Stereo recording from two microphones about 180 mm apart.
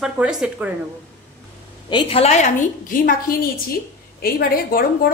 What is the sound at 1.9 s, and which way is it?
Speech, 30° left (ahead or behind).